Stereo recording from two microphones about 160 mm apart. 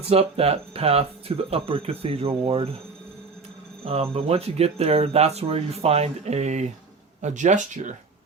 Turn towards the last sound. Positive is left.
turn(degrees=-50)  # may be behind; listen again after turning